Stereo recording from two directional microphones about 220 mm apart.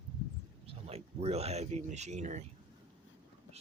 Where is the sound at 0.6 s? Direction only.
30° right (ahead or behind).